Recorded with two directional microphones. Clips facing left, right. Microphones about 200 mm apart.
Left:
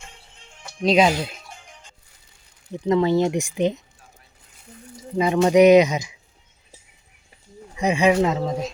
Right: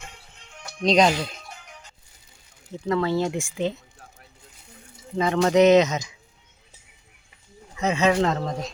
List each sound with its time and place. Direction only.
0.8 s speech: 5° left (ahead or behind)
2.7 s speech: 20° left (ahead or behind)
5.1 s speech: 10° left (ahead or behind)
7.8 s speech: 15° left (ahead or behind)